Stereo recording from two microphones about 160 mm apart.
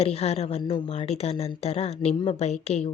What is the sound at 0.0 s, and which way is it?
Speech, 40° left (ahead or behind).